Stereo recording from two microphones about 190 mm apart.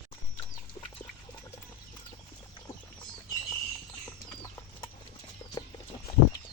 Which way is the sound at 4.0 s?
20° left (ahead or behind).